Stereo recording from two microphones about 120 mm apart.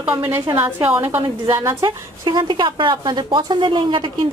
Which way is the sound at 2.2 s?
40° right (ahead or behind).